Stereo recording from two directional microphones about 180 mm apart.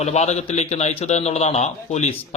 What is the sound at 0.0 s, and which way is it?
A man's voice, 35° left (ahead or behind).